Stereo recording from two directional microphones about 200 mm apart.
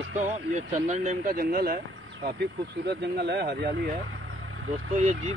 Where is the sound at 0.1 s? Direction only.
40° right (ahead or behind); by 3.7 s 55° right (ahead or behind).